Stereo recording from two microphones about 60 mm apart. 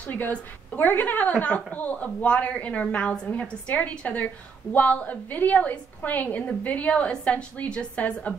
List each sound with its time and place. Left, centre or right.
0.0 s a woman's voice: left